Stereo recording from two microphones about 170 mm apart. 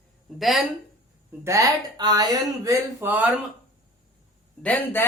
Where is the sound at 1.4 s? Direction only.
20° right (ahead or behind).